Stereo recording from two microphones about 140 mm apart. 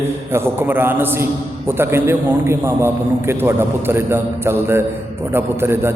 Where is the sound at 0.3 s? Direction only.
15° right (ahead or behind).